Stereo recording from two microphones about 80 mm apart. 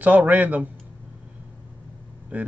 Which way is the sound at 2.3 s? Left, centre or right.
Right.